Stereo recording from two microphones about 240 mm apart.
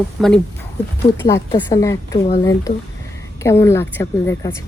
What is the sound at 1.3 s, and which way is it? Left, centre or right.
Speech, centre.